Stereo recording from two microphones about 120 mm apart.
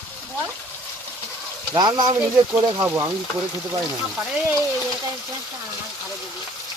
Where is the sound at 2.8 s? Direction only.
20° right (ahead or behind).